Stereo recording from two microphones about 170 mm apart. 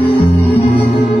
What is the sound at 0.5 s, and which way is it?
Music, 35° left (ahead or behind).